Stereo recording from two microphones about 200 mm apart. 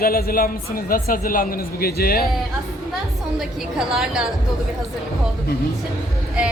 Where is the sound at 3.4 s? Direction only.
Centre (ahead or behind).